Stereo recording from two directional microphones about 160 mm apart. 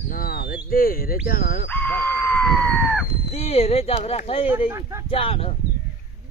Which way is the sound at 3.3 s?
40° left (ahead or behind).